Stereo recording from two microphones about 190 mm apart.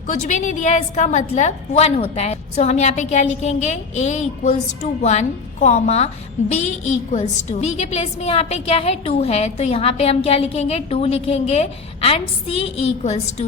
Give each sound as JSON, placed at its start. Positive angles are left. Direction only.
{"t": 0.3, "sound": "a woman's voice", "side_deg": 40}